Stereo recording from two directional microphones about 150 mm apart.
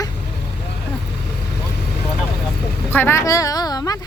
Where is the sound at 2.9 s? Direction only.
15° left (ahead or behind).